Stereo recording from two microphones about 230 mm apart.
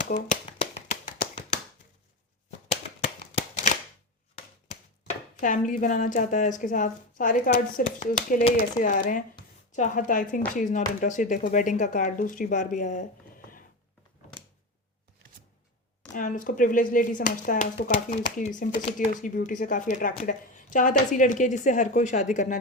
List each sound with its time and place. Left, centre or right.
0.1 s tap: left
4.4 s speech: left
16.1 s speech: left